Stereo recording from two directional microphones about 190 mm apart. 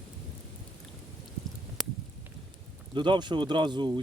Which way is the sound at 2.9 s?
25° right (ahead or behind).